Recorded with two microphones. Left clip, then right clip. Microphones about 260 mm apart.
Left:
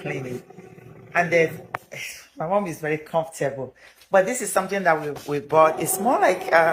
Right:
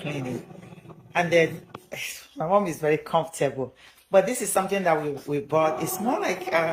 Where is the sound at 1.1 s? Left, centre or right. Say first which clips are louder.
Left 2 dB; centre.